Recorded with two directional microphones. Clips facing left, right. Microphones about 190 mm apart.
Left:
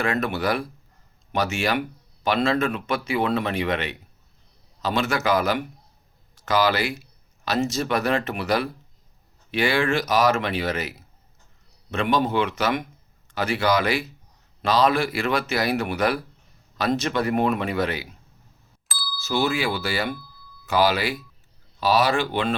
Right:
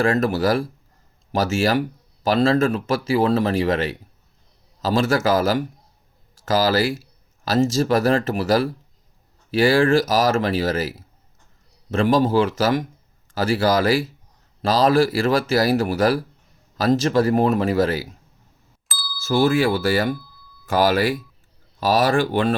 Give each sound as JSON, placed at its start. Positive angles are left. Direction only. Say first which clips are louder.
{"t": 0.0, "sound": "speech", "louder": "right 5 dB", "side_deg": -40}
{"t": 11.9, "sound": "speech", "louder": "right 5 dB", "side_deg": -40}
{"t": 18.9, "sound": "a sound", "louder": "even", "side_deg": 0}
{"t": 19.2, "sound": "speech", "louder": "right 6 dB", "side_deg": -50}